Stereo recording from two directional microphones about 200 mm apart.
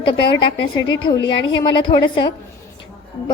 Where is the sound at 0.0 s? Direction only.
25° left (ahead or behind).